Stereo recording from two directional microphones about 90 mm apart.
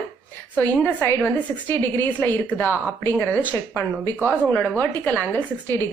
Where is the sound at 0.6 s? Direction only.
20° left (ahead or behind).